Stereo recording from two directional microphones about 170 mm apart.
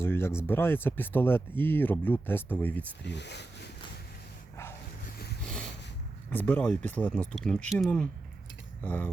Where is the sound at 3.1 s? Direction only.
90° left.